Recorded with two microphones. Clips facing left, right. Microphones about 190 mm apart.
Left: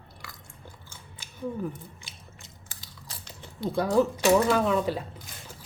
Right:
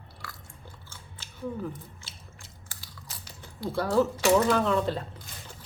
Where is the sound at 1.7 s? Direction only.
20° left (ahead or behind).